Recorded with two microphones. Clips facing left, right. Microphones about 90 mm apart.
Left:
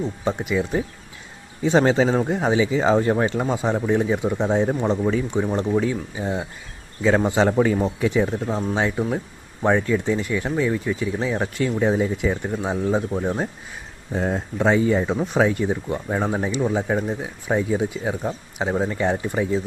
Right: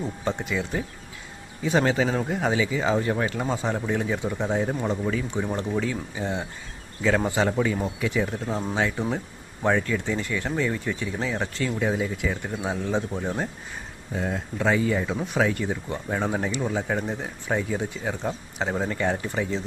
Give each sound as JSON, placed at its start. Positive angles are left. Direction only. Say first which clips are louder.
{"t": 0.3, "sound": "speech", "louder": "left 5 dB", "side_deg": 15}
{"t": 1.6, "sound": "speech", "louder": "left 5 dB", "side_deg": 30}
{"t": 3.4, "sound": "speech", "louder": "left 4 dB", "side_deg": 15}
{"t": 7.4, "sound": "speech", "louder": "left 5 dB", "side_deg": 35}
{"t": 14.1, "sound": "speech", "louder": "left 5 dB", "side_deg": 35}